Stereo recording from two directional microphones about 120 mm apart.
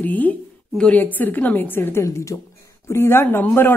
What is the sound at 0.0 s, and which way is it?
A woman's voice, 15° left (ahead or behind).